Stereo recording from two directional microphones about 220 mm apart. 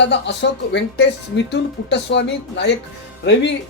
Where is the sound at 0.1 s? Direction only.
50° left (ahead or behind).